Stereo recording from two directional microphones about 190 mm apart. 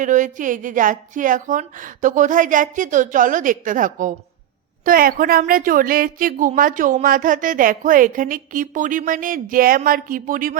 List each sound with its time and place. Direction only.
0.0 s speech: 40° right (ahead or behind)